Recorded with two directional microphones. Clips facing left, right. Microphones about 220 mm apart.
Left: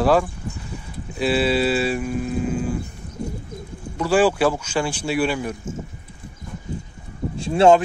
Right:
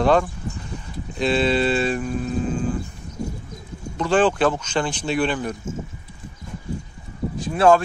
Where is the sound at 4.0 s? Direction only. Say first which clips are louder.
Left 1 dB; 10° left (ahead or behind).